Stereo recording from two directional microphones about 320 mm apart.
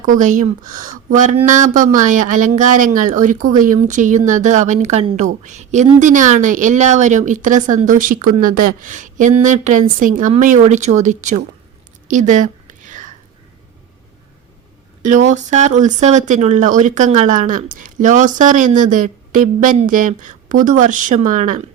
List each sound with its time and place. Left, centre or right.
0.0 s speech: right
12.0 s a sound: right
15.0 s speech: right